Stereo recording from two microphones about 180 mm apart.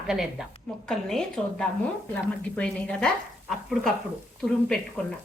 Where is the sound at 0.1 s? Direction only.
Centre (ahead or behind).